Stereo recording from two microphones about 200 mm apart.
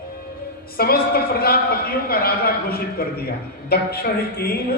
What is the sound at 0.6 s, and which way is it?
A man's voice, 50° left (ahead or behind).